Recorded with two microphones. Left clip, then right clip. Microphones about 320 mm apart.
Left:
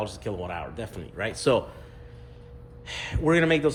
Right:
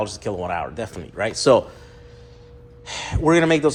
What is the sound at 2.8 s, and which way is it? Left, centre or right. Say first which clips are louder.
Speech: right 6 dB; centre.